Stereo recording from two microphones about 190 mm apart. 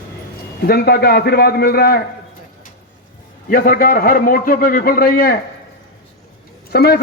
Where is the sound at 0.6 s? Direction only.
55° left (ahead or behind).